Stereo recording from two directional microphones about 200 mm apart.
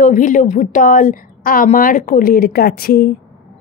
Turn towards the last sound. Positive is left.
turn(degrees=50)  # may be behind; listen again after turning